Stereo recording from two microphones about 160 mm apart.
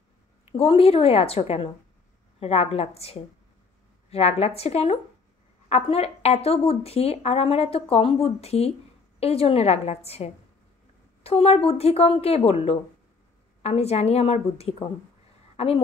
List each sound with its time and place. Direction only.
0.5 s a woman's voice: 35° left (ahead or behind)